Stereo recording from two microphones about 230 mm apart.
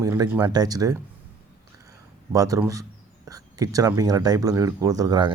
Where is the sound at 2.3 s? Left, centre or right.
Centre.